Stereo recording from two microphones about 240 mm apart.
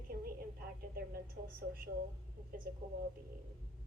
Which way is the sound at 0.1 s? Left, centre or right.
Right.